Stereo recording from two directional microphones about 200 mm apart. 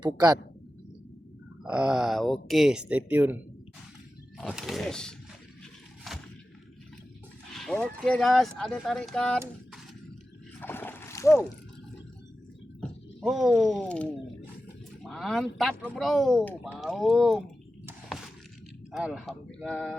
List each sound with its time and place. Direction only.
0.0 s speech: 20° right (ahead or behind)
1.6 s speech: 5° right (ahead or behind)
6.1 s a sound: centre (ahead or behind)
7.5 s speech: centre (ahead or behind)
10.6 s splash: 10° left (ahead or behind)
12.8 s speech: centre (ahead or behind)
18.9 s speech: centre (ahead or behind)